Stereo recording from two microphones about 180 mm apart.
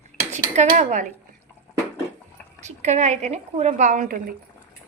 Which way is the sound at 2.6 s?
40° right (ahead or behind).